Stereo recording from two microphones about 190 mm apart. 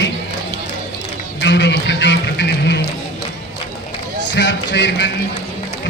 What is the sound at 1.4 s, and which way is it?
Speech, 65° left (ahead or behind).